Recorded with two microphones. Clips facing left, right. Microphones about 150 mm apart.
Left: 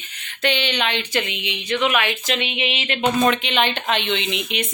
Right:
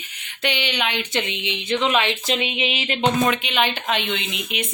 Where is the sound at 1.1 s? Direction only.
20° right (ahead or behind).